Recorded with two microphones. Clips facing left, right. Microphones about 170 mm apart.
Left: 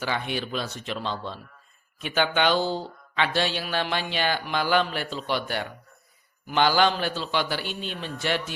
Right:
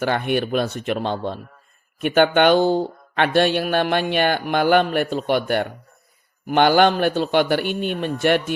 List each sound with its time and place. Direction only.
0.0 s speech: 55° right (ahead or behind)